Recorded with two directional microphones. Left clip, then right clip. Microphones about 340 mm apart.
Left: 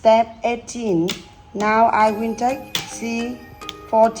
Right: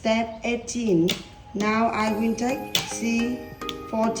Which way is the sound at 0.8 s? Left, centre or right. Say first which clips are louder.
Left 1 dB; centre.